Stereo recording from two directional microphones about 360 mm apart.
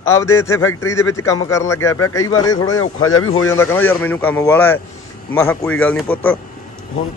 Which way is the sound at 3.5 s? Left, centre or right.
Centre.